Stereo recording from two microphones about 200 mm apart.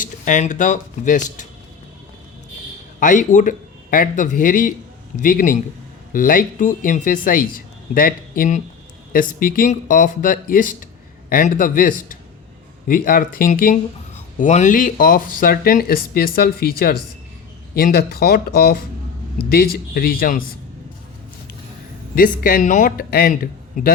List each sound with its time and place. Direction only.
0.0 s speech: 40° left (ahead or behind)
3.0 s a man's voice: 40° left (ahead or behind)
22.1 s speech: 45° left (ahead or behind)